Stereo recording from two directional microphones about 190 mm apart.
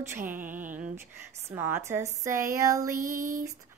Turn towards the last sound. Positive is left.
turn(degrees=-15)  # may be behind; listen again after turning